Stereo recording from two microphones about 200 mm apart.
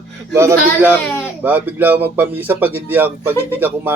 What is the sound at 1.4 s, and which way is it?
Speech, 10° right (ahead or behind).